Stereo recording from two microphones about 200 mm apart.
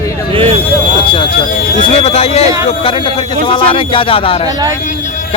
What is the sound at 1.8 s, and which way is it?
Speech, 30° left (ahead or behind).